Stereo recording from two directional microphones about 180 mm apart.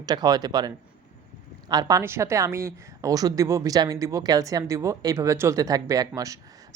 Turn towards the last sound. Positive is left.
turn(degrees=-20)  # may be behind; listen again after turning